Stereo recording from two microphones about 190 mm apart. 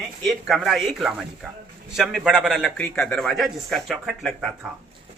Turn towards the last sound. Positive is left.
turn(degrees=0)  # may be behind; listen again after turning